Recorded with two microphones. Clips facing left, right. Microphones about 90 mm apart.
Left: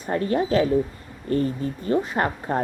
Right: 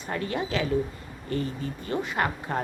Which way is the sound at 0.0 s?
40° left (ahead or behind).